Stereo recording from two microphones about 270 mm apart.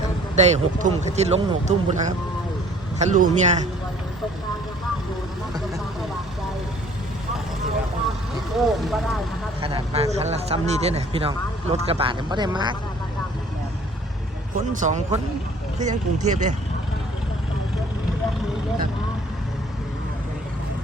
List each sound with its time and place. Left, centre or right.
0.3 s speech: right
8.5 s speech: centre
9.6 s speech: centre
14.7 s speech: right